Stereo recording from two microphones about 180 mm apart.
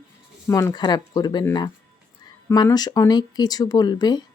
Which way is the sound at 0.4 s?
15° left (ahead or behind).